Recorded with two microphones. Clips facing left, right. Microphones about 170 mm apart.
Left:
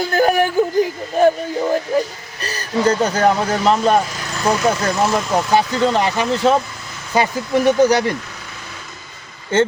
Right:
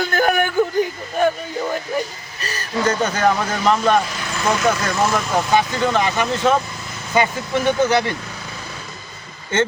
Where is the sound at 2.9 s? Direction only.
35° left (ahead or behind).